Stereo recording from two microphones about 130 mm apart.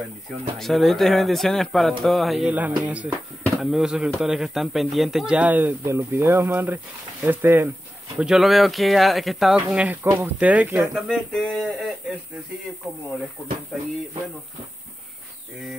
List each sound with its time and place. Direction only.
0.6 s speech: centre (ahead or behind); by 7.7 s 15° right (ahead or behind)
8.2 s speech: 5° right (ahead or behind)
10.0 s speech: 20° right (ahead or behind)
10.9 s speech: centre (ahead or behind)
13.7 s speech: centre (ahead or behind)